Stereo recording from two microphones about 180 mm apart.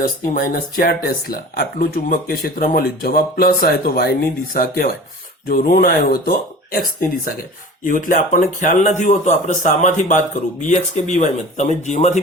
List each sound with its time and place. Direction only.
0.0 s speech: 50° left (ahead or behind)